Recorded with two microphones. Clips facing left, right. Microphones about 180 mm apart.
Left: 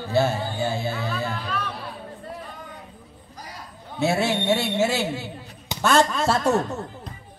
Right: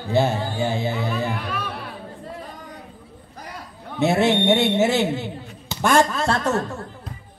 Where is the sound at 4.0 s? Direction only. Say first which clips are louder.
Right 4 dB; 20° right (ahead or behind).